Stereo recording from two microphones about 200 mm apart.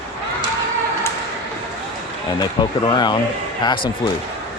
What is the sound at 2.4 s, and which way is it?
Speech, 20° left (ahead or behind).